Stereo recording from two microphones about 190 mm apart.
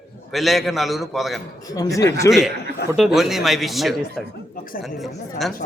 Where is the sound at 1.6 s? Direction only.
20° left (ahead or behind).